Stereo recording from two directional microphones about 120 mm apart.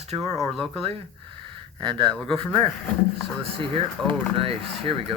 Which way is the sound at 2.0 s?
5° left (ahead or behind).